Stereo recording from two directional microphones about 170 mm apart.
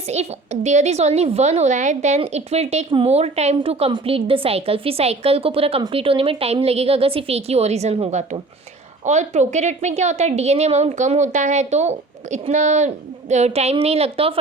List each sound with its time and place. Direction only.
0.1 s a woman's voice: 40° right (ahead or behind)